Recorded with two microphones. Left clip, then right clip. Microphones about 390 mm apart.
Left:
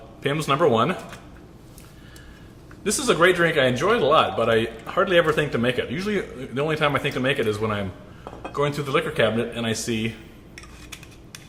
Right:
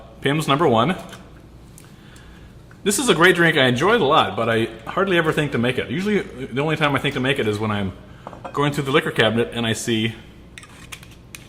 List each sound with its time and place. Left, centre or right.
0.2 s speech: right
2.8 s speech: right